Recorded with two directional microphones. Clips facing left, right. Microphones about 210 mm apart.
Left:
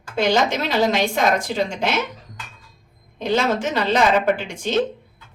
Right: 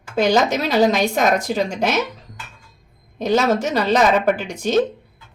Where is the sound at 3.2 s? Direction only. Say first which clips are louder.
Right 3 dB; 40° right (ahead or behind).